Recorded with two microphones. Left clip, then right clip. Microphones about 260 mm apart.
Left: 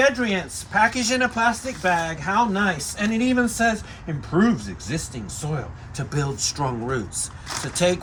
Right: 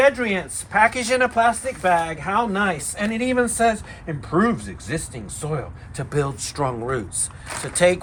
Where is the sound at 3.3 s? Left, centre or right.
Centre.